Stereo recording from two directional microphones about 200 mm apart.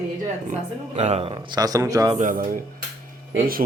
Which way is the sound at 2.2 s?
40° right (ahead or behind).